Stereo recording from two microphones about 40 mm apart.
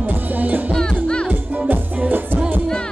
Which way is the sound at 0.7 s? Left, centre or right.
Left.